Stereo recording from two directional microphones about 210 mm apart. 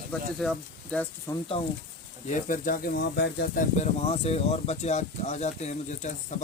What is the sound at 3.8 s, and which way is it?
Speech, 30° left (ahead or behind).